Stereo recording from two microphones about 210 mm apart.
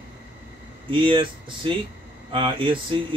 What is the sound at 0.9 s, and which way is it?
Speech, 25° right (ahead or behind).